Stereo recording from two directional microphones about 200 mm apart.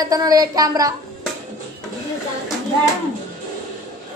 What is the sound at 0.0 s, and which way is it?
Speech, 20° right (ahead or behind).